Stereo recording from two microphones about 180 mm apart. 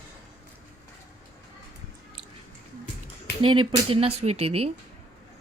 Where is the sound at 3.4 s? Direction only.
30° right (ahead or behind).